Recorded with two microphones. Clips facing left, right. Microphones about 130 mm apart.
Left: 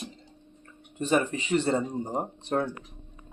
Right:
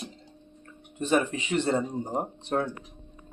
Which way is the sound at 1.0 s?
Centre (ahead or behind).